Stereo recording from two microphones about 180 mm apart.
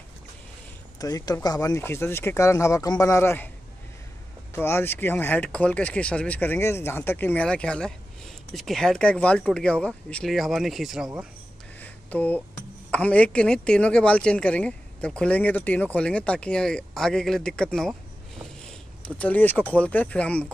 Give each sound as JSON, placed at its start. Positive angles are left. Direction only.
{"t": 0.9, "sound": "speech", "side_deg": 20}
{"t": 4.5, "sound": "speech", "side_deg": 15}
{"t": 11.8, "sound": "a sound", "side_deg": 10}
{"t": 12.9, "sound": "speech", "side_deg": 5}
{"t": 19.0, "sound": "speech", "side_deg": 10}